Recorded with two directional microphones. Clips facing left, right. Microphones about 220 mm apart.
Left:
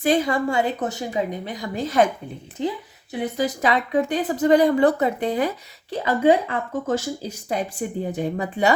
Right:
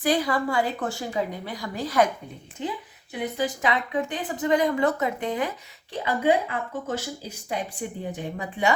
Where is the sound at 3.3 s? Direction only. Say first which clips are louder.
Left 4 dB; 40° left (ahead or behind).